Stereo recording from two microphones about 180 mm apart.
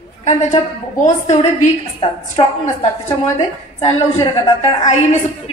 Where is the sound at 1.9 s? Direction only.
30° left (ahead or behind).